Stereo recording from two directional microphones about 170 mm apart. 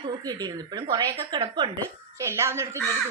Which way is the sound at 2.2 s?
15° right (ahead or behind).